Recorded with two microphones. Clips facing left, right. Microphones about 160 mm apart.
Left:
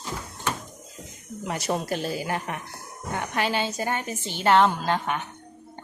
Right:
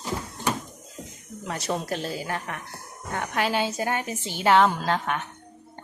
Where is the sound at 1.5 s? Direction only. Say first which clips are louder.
Left 1 dB; 10° left (ahead or behind).